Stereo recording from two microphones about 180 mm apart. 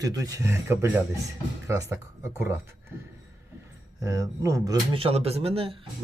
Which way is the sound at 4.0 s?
20° right (ahead or behind).